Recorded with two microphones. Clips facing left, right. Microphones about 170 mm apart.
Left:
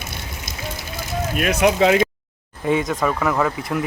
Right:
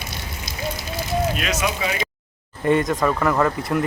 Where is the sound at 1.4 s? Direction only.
55° left (ahead or behind).